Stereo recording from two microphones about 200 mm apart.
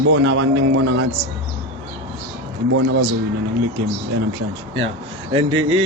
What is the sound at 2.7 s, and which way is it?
Speech, 75° right (ahead or behind).